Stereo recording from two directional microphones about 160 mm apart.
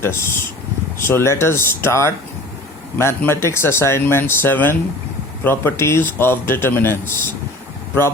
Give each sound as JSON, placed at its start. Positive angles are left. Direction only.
{"t": 0.0, "sound": "speech", "side_deg": 15}